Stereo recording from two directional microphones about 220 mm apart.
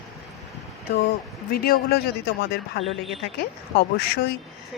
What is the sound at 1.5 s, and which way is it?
A woman's voice, 45° left (ahead or behind).